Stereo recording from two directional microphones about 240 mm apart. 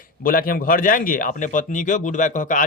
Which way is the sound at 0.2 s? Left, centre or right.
Left.